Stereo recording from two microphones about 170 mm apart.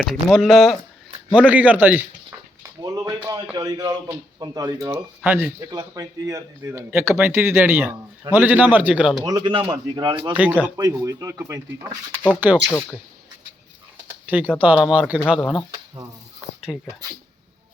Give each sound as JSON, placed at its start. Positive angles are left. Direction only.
{"t": 0.0, "sound": "speech", "side_deg": 0}
{"t": 2.6, "sound": "a sound", "side_deg": -20}
{"t": 3.5, "sound": "speech", "side_deg": -20}
{"t": 5.5, "sound": "speech", "side_deg": -20}
{"t": 9.2, "sound": "speech", "side_deg": -25}
{"t": 10.3, "sound": "speech", "side_deg": -10}
{"t": 14.3, "sound": "speech", "side_deg": -10}
{"t": 15.4, "sound": "speech", "side_deg": 5}
{"t": 16.7, "sound": "speech", "side_deg": 5}